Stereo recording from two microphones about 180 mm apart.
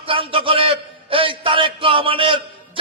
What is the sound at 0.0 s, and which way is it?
A man's voice, 30° right (ahead or behind).